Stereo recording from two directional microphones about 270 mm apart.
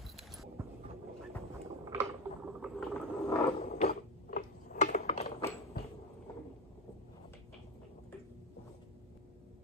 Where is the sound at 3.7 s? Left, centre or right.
Left.